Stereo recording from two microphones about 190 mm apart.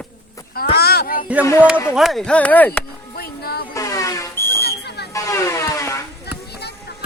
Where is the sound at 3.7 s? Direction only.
15° left (ahead or behind).